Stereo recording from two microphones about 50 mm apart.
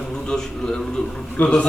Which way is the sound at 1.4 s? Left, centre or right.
Left.